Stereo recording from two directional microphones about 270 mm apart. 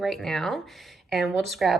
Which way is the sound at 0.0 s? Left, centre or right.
Centre.